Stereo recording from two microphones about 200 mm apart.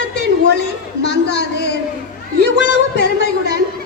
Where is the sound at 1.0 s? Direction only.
60° left (ahead or behind).